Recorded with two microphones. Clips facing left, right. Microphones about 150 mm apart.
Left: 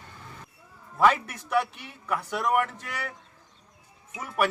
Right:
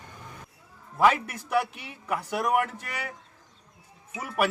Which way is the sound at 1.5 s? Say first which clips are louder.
Even; 10° right (ahead or behind).